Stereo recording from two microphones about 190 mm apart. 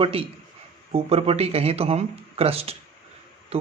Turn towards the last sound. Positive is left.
turn(degrees=-30)  # may be behind; listen again after turning